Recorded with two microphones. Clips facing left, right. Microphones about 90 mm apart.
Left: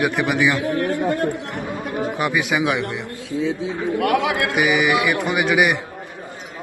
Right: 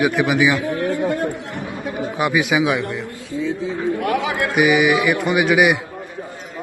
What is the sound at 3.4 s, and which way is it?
A man's voice, 90° left.